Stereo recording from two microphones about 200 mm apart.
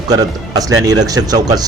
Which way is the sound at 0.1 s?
20° right (ahead or behind).